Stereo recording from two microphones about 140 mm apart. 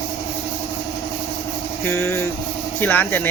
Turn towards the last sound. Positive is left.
turn(degrees=10)  # may be behind; listen again after turning